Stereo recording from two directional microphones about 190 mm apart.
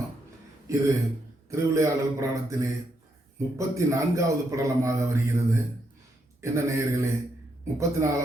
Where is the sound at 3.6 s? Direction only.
15° right (ahead or behind).